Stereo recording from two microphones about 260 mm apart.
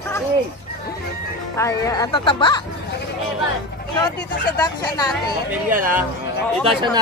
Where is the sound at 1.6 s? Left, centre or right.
Centre.